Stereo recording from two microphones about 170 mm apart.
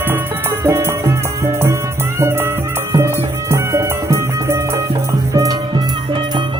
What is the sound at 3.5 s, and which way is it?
Music, 15° right (ahead or behind).